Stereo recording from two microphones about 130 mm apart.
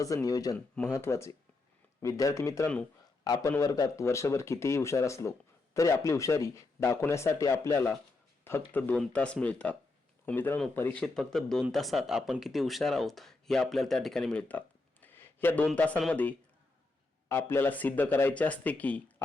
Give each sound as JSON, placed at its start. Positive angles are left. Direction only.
{"t": 0.0, "sound": "a man's voice", "side_deg": 25}